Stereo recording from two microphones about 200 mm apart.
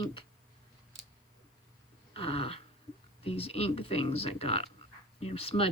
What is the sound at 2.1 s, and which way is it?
Speech, 30° left (ahead or behind).